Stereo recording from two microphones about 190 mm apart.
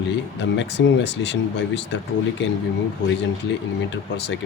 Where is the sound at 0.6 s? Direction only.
65° left (ahead or behind).